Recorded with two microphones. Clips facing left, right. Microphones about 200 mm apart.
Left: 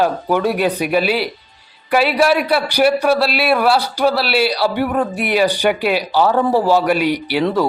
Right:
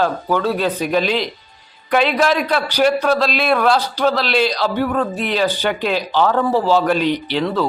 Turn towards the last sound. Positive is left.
turn(degrees=10)  # may be behind; listen again after turning